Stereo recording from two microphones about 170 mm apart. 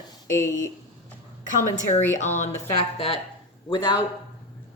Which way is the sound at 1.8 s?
45° left (ahead or behind).